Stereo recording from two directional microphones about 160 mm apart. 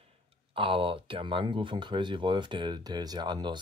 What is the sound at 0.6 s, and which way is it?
Speech, 35° right (ahead or behind).